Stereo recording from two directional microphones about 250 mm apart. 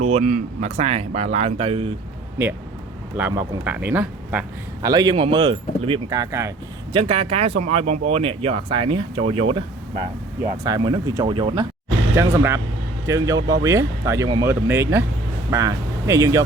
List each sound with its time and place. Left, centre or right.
0.1 s speech: right
3.2 s speech: centre
6.9 s speech: right